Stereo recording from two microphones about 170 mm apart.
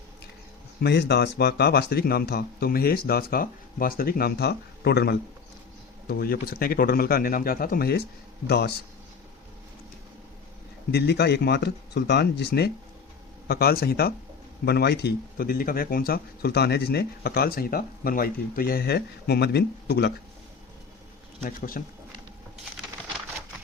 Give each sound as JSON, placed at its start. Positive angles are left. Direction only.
{"t": 0.8, "sound": "speech", "side_deg": 75}
{"t": 10.9, "sound": "speech", "side_deg": 75}
{"t": 21.4, "sound": "speech", "side_deg": 55}